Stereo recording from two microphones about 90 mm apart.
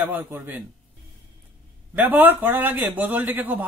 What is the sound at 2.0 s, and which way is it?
A man's voice, 20° right (ahead or behind).